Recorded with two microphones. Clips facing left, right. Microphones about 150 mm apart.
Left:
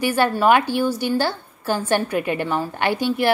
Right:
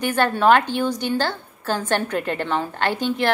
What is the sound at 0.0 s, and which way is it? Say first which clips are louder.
A woman's voice: left 1 dB; 10° left (ahead or behind).